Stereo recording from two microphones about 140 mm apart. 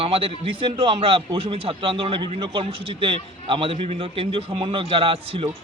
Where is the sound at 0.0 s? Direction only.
40° right (ahead or behind).